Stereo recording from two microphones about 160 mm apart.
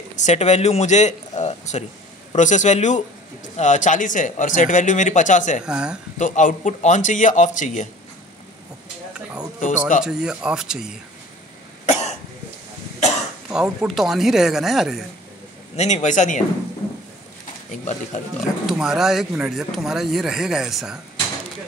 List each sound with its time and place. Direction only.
0.1 s speech: 45° left (ahead or behind)
5.7 s speech: 5° right (ahead or behind)
6.1 s speech: 50° left (ahead or behind)
9.6 s speech: 55° left (ahead or behind)
10.0 s speech: 5° right (ahead or behind)
11.9 s cough: 45° left (ahead or behind)
13.5 s speech: 5° right (ahead or behind)
15.7 s speech: 45° left (ahead or behind)
17.6 s speech: 50° left (ahead or behind)
18.7 s speech: 5° right (ahead or behind)